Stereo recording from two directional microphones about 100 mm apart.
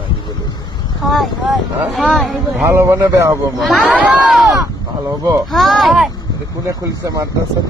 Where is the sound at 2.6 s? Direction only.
30° right (ahead or behind).